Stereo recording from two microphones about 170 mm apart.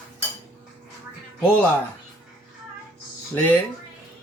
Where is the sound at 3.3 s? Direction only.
10° left (ahead or behind).